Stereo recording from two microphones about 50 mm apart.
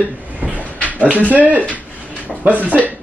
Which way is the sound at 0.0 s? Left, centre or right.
Right.